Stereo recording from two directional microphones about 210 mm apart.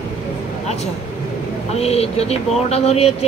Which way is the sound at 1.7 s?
30° left (ahead or behind).